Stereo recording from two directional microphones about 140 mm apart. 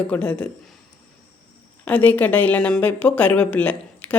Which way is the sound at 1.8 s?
10° left (ahead or behind).